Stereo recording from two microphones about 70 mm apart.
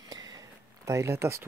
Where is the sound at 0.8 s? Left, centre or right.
Right.